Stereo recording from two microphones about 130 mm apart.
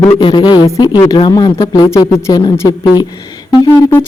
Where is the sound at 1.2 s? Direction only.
35° left (ahead or behind).